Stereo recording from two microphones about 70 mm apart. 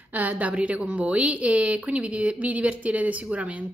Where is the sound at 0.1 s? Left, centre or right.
Right.